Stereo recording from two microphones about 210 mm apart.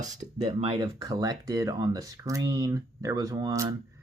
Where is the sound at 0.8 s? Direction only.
15° right (ahead or behind).